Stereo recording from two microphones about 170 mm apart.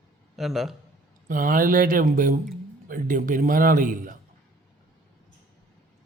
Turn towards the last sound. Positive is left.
turn(degrees=-50)  # may be behind; listen again after turning